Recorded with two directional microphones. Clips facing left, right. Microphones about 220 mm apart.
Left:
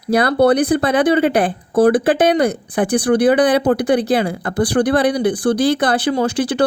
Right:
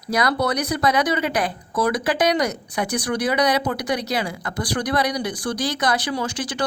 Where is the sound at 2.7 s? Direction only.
50° left (ahead or behind).